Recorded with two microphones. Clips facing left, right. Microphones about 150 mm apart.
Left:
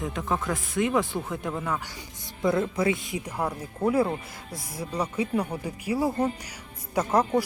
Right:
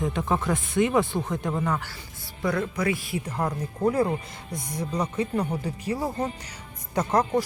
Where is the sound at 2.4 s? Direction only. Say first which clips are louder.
Left 2 dB; 25° left (ahead or behind).